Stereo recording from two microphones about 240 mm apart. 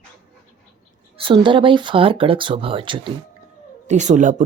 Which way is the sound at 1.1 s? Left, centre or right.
Right.